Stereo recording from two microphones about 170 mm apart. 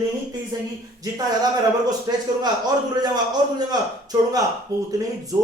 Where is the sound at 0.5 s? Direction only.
25° right (ahead or behind).